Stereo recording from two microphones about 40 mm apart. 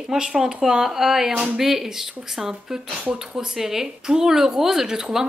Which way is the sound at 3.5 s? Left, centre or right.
Centre.